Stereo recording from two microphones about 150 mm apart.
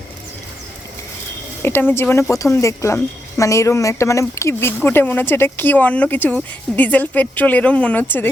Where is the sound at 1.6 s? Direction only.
15° left (ahead or behind).